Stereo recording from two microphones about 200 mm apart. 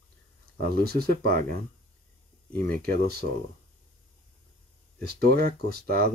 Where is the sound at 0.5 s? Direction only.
50° right (ahead or behind).